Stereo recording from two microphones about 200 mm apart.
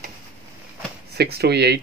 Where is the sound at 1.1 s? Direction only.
55° right (ahead or behind).